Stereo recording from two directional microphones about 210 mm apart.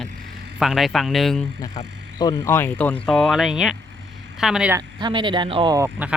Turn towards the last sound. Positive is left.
turn(degrees=-10)  # may be behind; listen again after turning